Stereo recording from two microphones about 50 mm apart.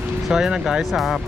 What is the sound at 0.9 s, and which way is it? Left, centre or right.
Speech, centre.